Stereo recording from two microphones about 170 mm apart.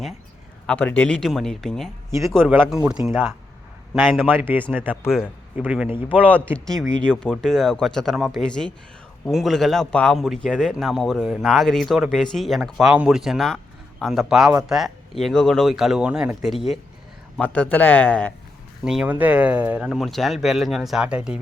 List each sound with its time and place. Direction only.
0.7 s speech: 10° left (ahead or behind)
2.0 s speech: 15° right (ahead or behind)
2.6 s speech: 5° right (ahead or behind)
2.9 s speech: 15° right (ahead or behind)
3.9 s speech: centre (ahead or behind)
4.4 s speech: 10° right (ahead or behind)
5.9 s speech: 30° left (ahead or behind)
6.3 s speech: 5° left (ahead or behind)
18.9 s speech: 5° right (ahead or behind)